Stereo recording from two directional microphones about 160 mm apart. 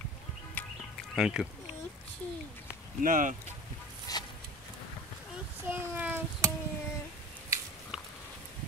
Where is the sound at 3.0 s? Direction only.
55° right (ahead or behind).